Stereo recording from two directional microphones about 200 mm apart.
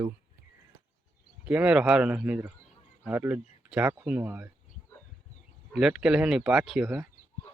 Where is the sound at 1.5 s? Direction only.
5° right (ahead or behind).